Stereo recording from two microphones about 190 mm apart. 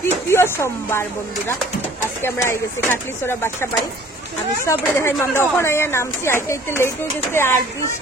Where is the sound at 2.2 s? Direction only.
10° left (ahead or behind).